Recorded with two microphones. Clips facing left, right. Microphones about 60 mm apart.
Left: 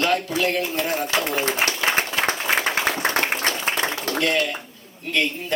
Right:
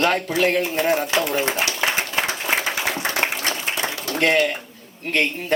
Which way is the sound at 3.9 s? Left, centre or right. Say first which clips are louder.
Left 1 dB; left.